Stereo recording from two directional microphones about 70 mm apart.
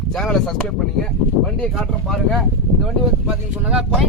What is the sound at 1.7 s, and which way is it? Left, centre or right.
Speech, centre.